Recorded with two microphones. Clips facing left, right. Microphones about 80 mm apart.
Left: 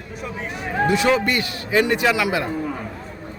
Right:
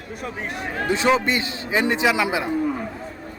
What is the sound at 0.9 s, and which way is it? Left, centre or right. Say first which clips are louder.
A man's voice: right 2 dB; right.